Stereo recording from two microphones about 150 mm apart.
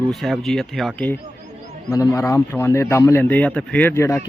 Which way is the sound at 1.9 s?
20° left (ahead or behind).